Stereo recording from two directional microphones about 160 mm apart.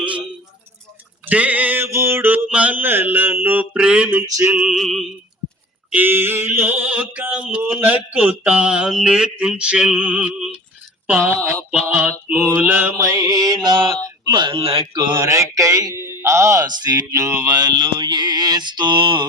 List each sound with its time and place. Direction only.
1.2 s mantra: 10° right (ahead or behind)
5.9 s mantra: 10° right (ahead or behind)
11.0 s speech: 10° right (ahead or behind)
11.9 s mantra: 15° right (ahead or behind)
13.1 s speech: 20° right (ahead or behind)
16.0 s speech: 25° left (ahead or behind)
16.2 s speech: 15° right (ahead or behind)